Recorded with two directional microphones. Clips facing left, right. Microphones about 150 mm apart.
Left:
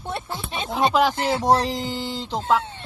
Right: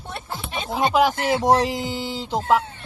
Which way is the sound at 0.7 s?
10° right (ahead or behind).